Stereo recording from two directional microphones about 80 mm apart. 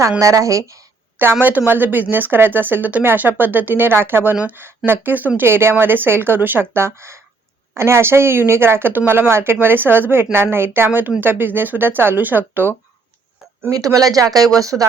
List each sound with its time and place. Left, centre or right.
0.2 s speech: right
1.2 s speech: right
13.7 s speech: right